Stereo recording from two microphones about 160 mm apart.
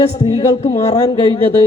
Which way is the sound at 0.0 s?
40° left (ahead or behind).